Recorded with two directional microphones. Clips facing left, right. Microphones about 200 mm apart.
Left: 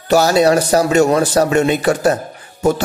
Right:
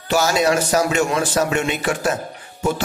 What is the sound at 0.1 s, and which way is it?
A man's voice, 35° left (ahead or behind).